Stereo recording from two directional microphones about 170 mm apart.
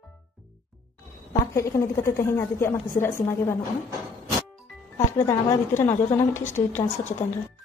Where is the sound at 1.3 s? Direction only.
15° left (ahead or behind).